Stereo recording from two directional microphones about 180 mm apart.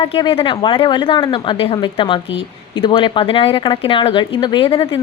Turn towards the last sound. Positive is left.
turn(degrees=30)  # may be behind; listen again after turning